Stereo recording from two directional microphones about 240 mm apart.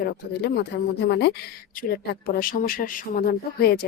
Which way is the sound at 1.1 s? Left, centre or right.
Left.